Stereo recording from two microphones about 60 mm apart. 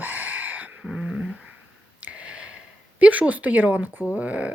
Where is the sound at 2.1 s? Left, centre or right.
Centre.